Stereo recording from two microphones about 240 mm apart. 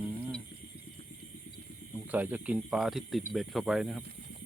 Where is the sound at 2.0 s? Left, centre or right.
Centre.